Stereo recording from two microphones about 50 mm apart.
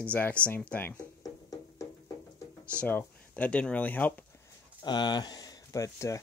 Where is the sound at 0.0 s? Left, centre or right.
Left.